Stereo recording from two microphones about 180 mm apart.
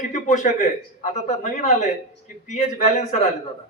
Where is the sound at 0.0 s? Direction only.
45° left (ahead or behind).